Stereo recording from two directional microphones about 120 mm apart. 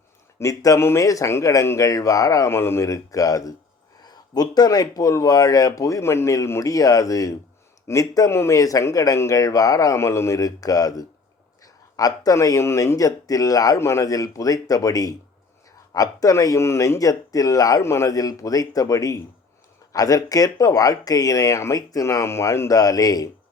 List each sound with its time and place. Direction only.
0.3 s speech: 30° left (ahead or behind)